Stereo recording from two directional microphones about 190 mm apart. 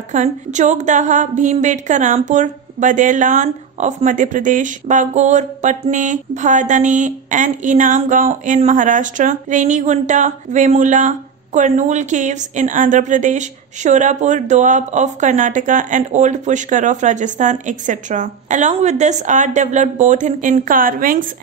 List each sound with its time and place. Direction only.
0.1 s a woman's voice: 40° right (ahead or behind)